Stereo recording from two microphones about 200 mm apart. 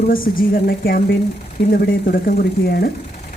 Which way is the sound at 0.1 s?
45° left (ahead or behind).